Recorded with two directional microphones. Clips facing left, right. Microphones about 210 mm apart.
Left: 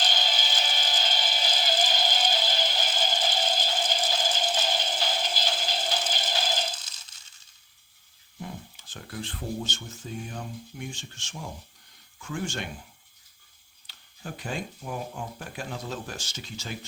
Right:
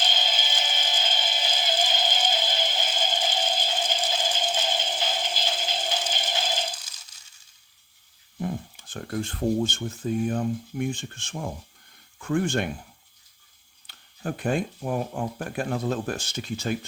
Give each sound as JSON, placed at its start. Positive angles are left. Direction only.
{"t": 0.0, "sound": "music", "side_deg": -20}
{"t": 8.9, "sound": "speech", "side_deg": -45}
{"t": 13.8, "sound": "speech", "side_deg": -55}